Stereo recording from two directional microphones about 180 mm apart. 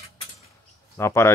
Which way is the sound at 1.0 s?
15° left (ahead or behind).